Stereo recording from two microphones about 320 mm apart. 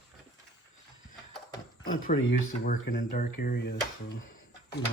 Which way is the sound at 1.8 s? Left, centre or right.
Left.